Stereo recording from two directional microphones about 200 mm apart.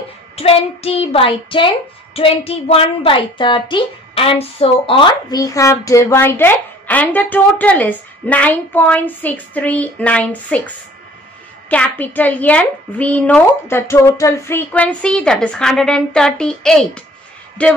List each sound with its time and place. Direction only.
0.4 s child singing: 30° left (ahead or behind)
2.1 s a woman's voice: 30° left (ahead or behind); by 10.7 s 5° left (ahead or behind)
11.7 s a woman's voice: 5° left (ahead or behind)